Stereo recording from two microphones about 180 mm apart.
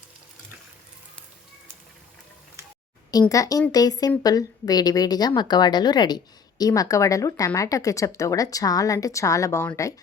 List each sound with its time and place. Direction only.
3.1 s a woman's voice: 20° left (ahead or behind)